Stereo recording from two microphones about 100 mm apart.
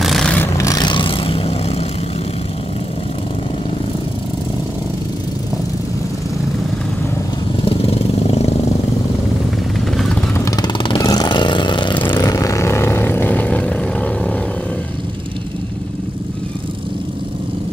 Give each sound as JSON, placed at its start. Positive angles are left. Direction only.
{"t": 0.0, "sound": "vehicle", "side_deg": 0}
{"t": 0.6, "sound": "vehicle", "side_deg": 35}
{"t": 0.8, "sound": "vehicle", "side_deg": 60}
{"t": 7.6, "sound": "vehicle", "side_deg": 70}
{"t": 10.3, "sound": "vehicle", "side_deg": 30}
{"t": 10.6, "sound": "vehicle", "side_deg": 55}
{"t": 11.0, "sound": "vehicle", "side_deg": 40}
{"t": 12.2, "sound": "vehicle", "side_deg": 35}